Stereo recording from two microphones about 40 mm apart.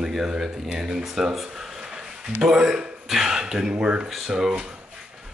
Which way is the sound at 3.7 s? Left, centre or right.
Right.